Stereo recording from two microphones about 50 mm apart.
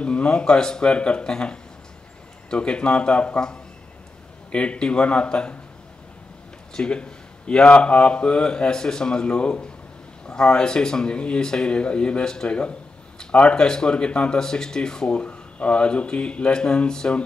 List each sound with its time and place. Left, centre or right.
0.0 s speech: left
4.5 s speech: left
6.7 s speech: centre